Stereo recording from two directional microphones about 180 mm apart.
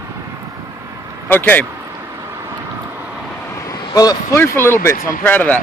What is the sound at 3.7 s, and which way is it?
Speech, 20° left (ahead or behind).